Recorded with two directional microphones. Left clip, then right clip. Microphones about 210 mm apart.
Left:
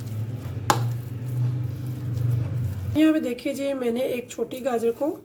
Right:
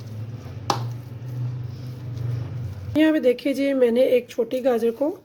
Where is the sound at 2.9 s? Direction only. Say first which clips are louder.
Right 3 dB; 40° right (ahead or behind).